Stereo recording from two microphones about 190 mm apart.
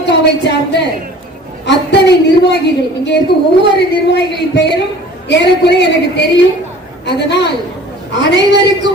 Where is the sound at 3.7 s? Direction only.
60° left (ahead or behind).